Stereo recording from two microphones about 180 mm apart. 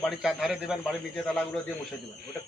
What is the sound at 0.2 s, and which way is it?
Speech, centre (ahead or behind).